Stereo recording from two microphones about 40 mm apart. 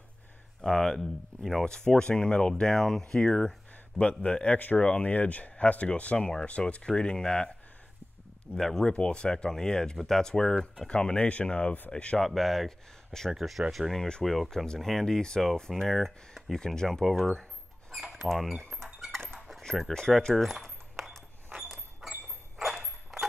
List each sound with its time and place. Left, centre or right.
0.6 s speech: centre
0.9 s speech: centre; by 2.5 s left
2.6 s speech: centre
8.5 s speech: centre
8.9 s speech: left
11.1 s speech: left
12.3 s speech: centre
13.3 s speech: centre
13.9 s speech: left
14.2 s speech: centre
17.0 s speech: centre
19.1 s dog: centre
19.9 s speech: centre
22.0 s a sound: centre